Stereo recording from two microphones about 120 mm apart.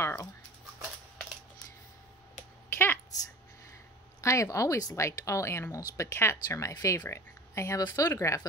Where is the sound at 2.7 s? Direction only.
20° left (ahead or behind).